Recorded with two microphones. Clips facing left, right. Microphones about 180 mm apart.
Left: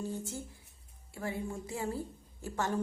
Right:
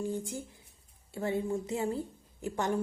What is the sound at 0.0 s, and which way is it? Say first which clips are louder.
A woman's voice: right 4 dB; 15° right (ahead or behind).